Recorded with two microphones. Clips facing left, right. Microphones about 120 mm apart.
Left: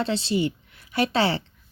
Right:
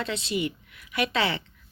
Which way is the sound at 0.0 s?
30° left (ahead or behind).